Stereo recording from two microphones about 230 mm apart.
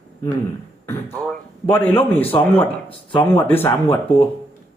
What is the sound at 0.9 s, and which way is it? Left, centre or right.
Speech, centre.